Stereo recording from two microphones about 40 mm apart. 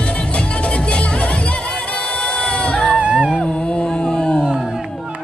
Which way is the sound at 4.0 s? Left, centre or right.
Centre.